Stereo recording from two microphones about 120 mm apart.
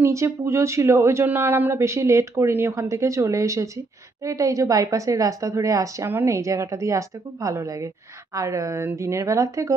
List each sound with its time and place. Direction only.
0.0 s speech: 25° right (ahead or behind)